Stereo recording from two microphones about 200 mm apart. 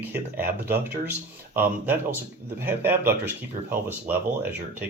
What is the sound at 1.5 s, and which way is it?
Speech, 10° right (ahead or behind).